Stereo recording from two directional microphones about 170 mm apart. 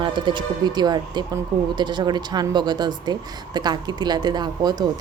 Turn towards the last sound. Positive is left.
turn(degrees=-25)  # may be behind; listen again after turning